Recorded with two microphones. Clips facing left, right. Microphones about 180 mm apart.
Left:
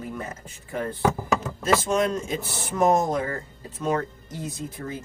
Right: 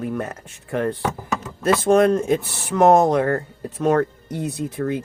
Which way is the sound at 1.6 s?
55° right (ahead or behind).